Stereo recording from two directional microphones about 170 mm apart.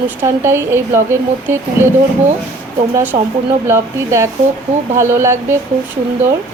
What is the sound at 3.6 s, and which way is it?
Speech, 15° right (ahead or behind).